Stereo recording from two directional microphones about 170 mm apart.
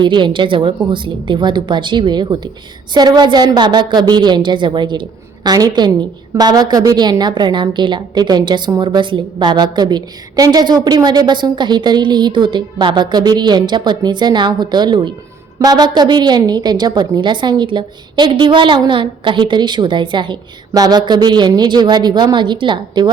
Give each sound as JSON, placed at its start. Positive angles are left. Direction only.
{"t": 0.0, "sound": "a woman's voice", "side_deg": -25}